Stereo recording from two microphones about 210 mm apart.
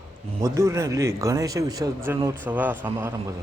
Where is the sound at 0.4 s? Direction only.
15° right (ahead or behind).